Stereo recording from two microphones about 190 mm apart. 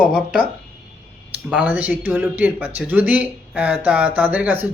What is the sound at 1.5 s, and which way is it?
Speech, 5° right (ahead or behind).